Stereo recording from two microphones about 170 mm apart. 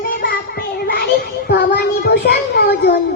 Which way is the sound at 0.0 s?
60° left (ahead or behind).